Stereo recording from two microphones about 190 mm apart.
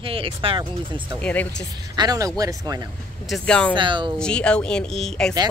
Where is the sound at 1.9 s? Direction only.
20° right (ahead or behind).